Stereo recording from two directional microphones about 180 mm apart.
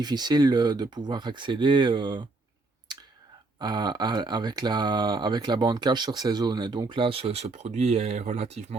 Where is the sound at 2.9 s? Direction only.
25° right (ahead or behind).